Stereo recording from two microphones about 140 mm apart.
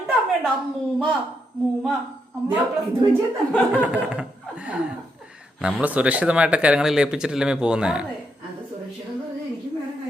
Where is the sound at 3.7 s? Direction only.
10° right (ahead or behind).